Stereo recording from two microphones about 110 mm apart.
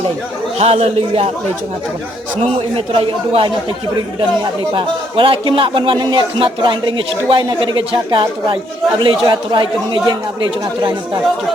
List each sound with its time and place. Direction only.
0.6 s a man's voice: 70° right (ahead or behind)
2.9 s speech: 55° right (ahead or behind)
4.7 s a man's voice: 50° right (ahead or behind)